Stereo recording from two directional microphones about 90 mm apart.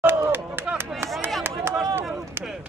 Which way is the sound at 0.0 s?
25° right (ahead or behind).